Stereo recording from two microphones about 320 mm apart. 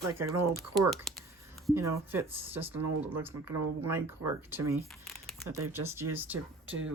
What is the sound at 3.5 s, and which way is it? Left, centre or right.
Speech, right.